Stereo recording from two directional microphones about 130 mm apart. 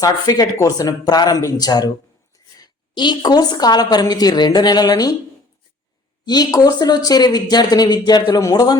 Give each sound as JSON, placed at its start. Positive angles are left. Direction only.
{"t": 0.0, "sound": "speech", "side_deg": 30}
{"t": 6.2, "sound": "speech", "side_deg": 30}